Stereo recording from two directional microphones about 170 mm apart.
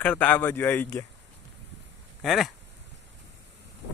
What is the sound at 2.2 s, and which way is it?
Speech, centre (ahead or behind).